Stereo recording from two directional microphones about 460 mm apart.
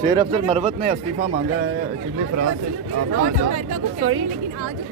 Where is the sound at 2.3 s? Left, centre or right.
Right.